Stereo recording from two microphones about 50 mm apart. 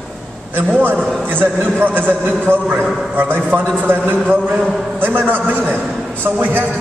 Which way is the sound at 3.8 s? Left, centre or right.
Right.